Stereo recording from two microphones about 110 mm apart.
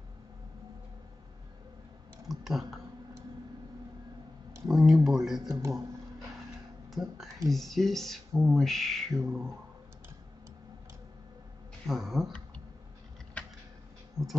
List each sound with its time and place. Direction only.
2.2 s speech: centre (ahead or behind)
4.6 s speech: 5° right (ahead or behind)
5.6 s speech: 30° right (ahead or behind)
6.9 s speech: centre (ahead or behind)
11.8 s speech: centre (ahead or behind)
14.2 s a sound: 30° right (ahead or behind)